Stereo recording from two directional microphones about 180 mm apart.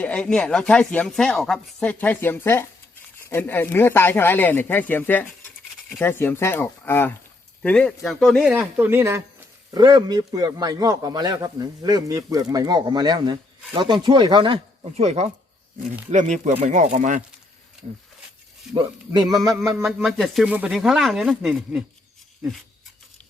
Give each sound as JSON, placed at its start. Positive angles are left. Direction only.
{"t": 0.0, "sound": "speech", "side_deg": 5}
{"t": 9.7, "sound": "a man's voice", "side_deg": -25}
{"t": 18.7, "sound": "a man's voice", "side_deg": -25}
{"t": 19.7, "sound": "speech", "side_deg": -5}